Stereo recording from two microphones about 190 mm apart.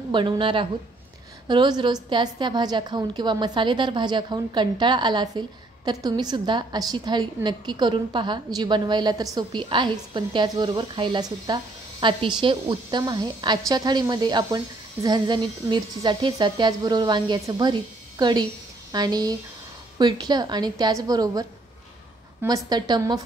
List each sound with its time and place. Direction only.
0.1 s a woman's voice: 25° right (ahead or behind)
22.7 s a woman's voice: 20° right (ahead or behind)